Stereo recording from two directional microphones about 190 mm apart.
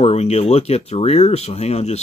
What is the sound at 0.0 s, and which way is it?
Speech, 35° left (ahead or behind).